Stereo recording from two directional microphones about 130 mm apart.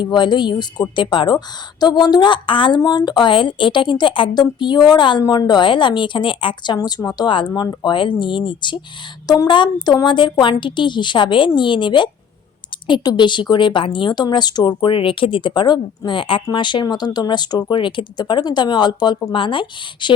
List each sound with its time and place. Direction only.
0.0 s speech: 35° left (ahead or behind)